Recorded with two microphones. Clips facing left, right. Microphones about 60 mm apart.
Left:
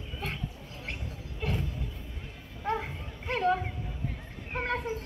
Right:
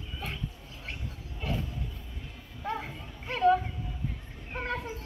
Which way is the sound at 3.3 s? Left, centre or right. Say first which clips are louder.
Right 3 dB; left.